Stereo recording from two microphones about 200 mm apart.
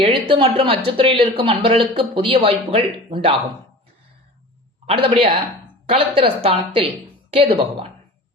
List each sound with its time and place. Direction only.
0.0 s speech: 25° right (ahead or behind)
4.9 s speech: 25° right (ahead or behind)